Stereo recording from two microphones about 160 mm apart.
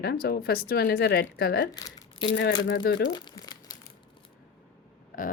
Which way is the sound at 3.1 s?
25° left (ahead or behind).